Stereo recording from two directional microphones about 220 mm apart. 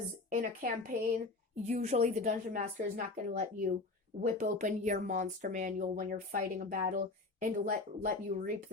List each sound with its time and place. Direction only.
0.3 s speech: 35° right (ahead or behind)